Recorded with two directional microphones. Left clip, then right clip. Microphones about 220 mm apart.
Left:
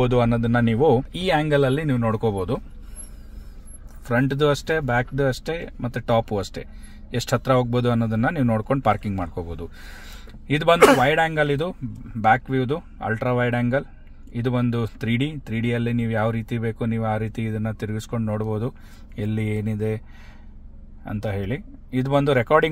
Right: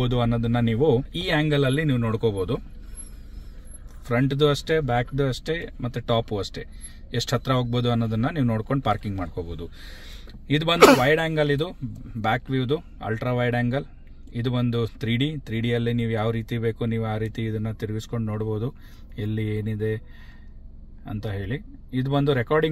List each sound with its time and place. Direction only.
0.0 s speech: 35° left (ahead or behind)
4.0 s speech: 40° left (ahead or behind)
19.1 s mantra: 40° left (ahead or behind)
21.0 s speech: 40° left (ahead or behind)